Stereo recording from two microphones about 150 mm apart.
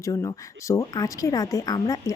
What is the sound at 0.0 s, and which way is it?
Speech, 25° left (ahead or behind).